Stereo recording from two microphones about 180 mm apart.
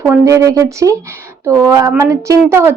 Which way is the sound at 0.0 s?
15° right (ahead or behind).